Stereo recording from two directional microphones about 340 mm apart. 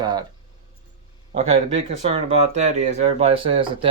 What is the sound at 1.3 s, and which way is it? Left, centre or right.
Speech, centre.